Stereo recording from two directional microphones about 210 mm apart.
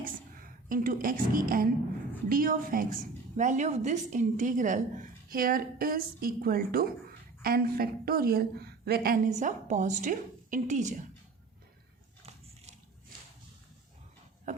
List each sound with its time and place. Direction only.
0.0 s a woman's voice: 40° right (ahead or behind)